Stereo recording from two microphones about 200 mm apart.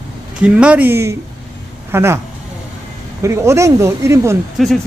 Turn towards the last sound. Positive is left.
turn(degrees=0)  # may be behind; listen again after turning